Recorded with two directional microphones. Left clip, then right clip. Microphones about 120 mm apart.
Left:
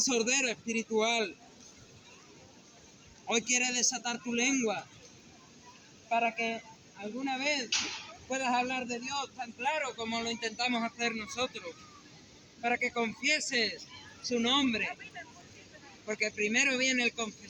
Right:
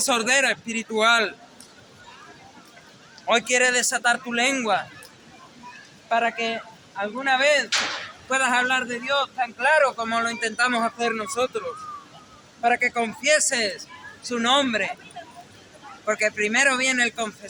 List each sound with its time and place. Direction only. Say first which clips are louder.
0.2 s a man's voice: right 10 dB; 40° right (ahead or behind)
3.2 s a man's voice: right 11 dB; 35° right (ahead or behind)
6.1 s a man's voice: right 8 dB; 35° right (ahead or behind)
12.6 s a man's voice: right 10 dB; 50° right (ahead or behind)
14.3 s a man's voice: right 8 dB; 40° right (ahead or behind)
16.4 s a man's voice: right 6 dB; 45° right (ahead or behind)